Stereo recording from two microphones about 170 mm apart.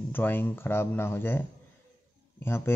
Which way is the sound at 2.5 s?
15° left (ahead or behind).